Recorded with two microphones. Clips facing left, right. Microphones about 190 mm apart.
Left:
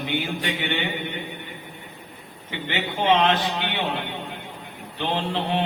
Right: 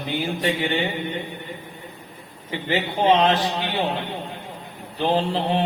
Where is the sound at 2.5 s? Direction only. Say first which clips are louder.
Right 4 dB; 40° right (ahead or behind).